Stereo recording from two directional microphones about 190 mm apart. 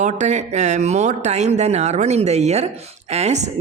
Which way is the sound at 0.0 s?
40° right (ahead or behind).